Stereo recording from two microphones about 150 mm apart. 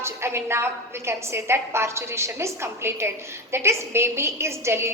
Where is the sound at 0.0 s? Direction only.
15° right (ahead or behind).